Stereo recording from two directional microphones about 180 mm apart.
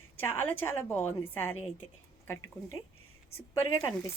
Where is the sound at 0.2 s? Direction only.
15° left (ahead or behind).